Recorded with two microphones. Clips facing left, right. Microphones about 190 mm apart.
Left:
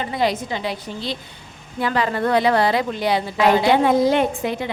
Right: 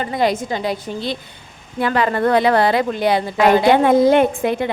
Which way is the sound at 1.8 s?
55° right (ahead or behind).